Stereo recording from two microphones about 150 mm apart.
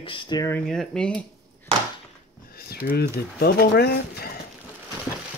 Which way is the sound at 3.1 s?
90° left.